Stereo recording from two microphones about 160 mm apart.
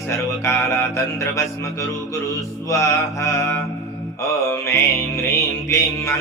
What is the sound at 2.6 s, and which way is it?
Mantra, 20° left (ahead or behind).